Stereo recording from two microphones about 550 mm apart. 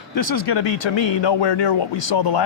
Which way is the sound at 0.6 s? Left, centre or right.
Left.